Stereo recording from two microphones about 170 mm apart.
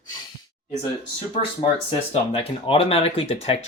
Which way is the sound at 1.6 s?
35° left (ahead or behind).